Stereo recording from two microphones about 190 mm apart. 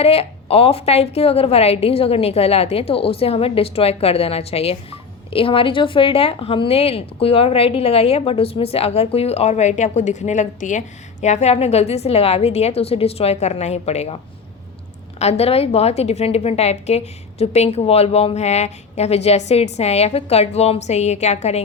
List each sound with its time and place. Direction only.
0.0 s a woman's voice: 30° left (ahead or behind)
15.2 s a woman's voice: 35° left (ahead or behind)